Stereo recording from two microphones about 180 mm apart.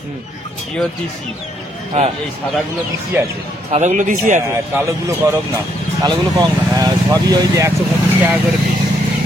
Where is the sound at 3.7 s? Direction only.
40° right (ahead or behind).